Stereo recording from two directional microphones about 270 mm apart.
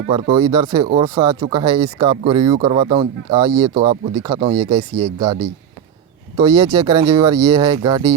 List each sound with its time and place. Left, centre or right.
0.1 s speech: centre